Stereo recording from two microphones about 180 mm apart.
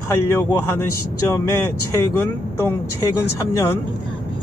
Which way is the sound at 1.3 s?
15° left (ahead or behind).